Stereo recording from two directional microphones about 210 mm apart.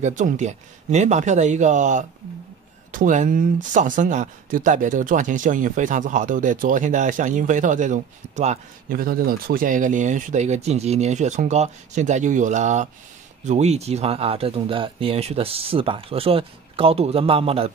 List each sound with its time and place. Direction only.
0.0 s speech: 35° right (ahead or behind)